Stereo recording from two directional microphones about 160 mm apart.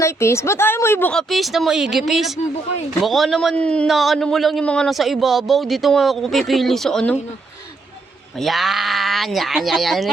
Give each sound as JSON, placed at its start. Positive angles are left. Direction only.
{"t": 0.0, "sound": "a woman's voice", "side_deg": 15}
{"t": 1.3, "sound": "a man's voice", "side_deg": 0}
{"t": 8.4, "sound": "a man's voice", "side_deg": 0}